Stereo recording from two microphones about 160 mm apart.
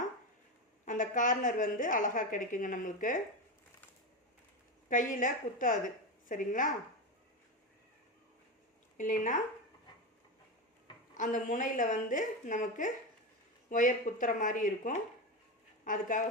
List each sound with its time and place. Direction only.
0.9 s a woman's voice: 55° left (ahead or behind)
4.9 s a woman's voice: 55° left (ahead or behind)
9.0 s a woman's voice: 55° left (ahead or behind)
11.1 s a woman's voice: 50° left (ahead or behind)